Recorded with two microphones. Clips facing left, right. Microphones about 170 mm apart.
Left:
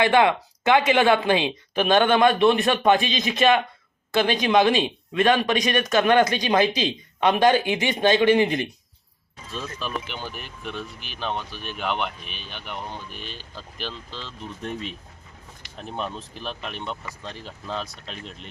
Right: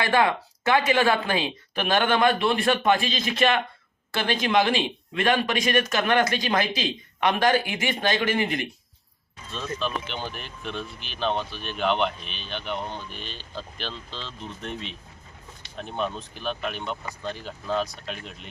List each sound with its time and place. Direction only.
0.0 s speech: 20° left (ahead or behind)
14.7 s speech: 45° left (ahead or behind)
15.9 s speech: centre (ahead or behind)